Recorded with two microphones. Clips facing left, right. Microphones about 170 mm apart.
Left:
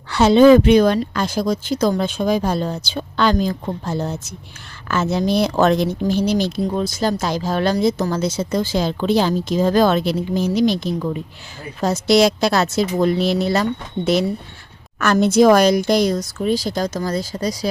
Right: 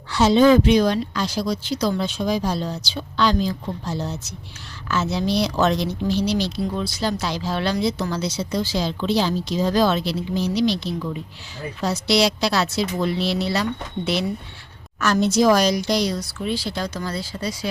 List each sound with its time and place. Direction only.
0.1 s speech: 60° left (ahead or behind)
14.9 s speech: 55° left (ahead or behind); by 17.7 s 40° left (ahead or behind)